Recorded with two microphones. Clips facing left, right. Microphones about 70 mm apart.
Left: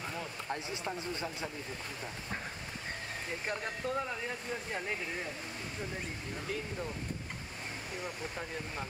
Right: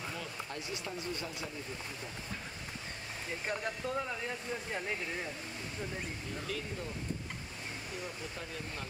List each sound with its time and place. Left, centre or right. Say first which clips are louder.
0.5 s speech: left 3 dB; left
3.4 s speech: even; centre
6.4 s speech: left 3 dB; left